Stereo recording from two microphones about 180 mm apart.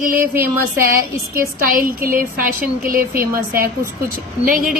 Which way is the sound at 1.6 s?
50° right (ahead or behind).